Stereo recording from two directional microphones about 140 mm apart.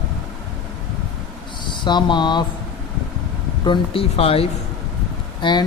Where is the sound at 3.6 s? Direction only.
40° left (ahead or behind).